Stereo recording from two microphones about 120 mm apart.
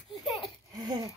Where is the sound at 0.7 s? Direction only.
30° right (ahead or behind).